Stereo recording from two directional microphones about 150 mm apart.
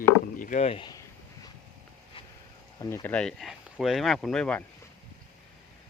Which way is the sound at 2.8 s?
15° left (ahead or behind).